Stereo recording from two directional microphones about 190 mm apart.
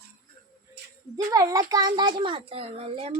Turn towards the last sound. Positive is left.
turn(degrees=-30)  # may be behind; listen again after turning